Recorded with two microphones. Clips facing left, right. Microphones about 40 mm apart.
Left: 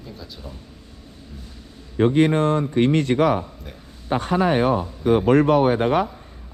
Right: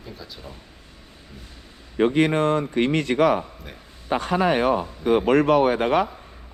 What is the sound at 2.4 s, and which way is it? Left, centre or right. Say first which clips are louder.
Speech: left 2 dB; right.